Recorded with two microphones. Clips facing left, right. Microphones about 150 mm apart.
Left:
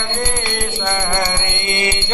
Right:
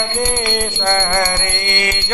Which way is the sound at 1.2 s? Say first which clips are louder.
Right 2 dB; 25° left (ahead or behind).